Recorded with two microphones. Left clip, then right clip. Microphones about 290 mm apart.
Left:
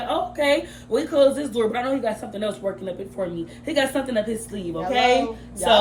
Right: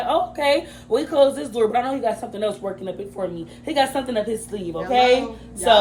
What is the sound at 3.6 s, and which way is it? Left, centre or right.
A woman's voice, centre.